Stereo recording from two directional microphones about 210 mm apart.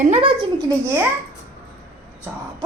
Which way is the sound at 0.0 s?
30° right (ahead or behind).